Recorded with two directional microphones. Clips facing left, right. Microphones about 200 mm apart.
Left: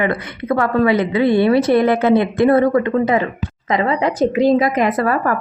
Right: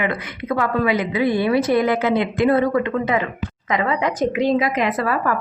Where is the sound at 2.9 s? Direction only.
35° left (ahead or behind).